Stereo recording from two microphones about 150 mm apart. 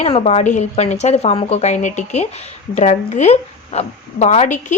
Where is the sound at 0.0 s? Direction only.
45° left (ahead or behind).